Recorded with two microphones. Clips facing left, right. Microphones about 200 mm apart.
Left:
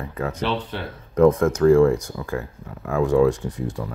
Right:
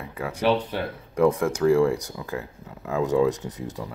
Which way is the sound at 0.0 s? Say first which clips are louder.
Right 1 dB; 10° right (ahead or behind).